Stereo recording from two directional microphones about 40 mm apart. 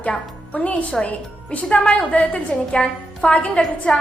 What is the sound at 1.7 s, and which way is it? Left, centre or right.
A woman's voice, left.